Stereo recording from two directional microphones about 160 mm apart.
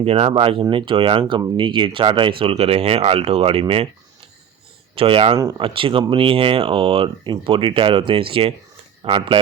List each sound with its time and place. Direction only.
0.0 s speech: 40° right (ahead or behind)
4.9 s speech: 35° right (ahead or behind)
5.4 s speech: 20° right (ahead or behind)
5.6 s speech: 35° right (ahead or behind)